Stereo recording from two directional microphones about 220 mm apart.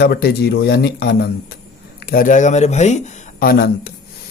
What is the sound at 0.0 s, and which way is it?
Speech, 45° left (ahead or behind).